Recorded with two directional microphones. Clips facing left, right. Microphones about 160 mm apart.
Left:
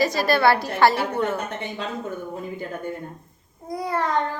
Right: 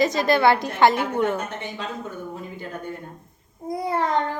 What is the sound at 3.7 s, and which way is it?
Speech, 20° right (ahead or behind).